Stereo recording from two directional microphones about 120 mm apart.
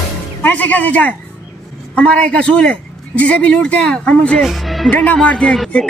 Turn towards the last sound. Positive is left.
turn(degrees=5)  # may be behind; listen again after turning